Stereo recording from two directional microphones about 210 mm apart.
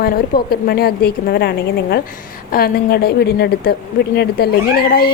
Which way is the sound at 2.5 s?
45° left (ahead or behind).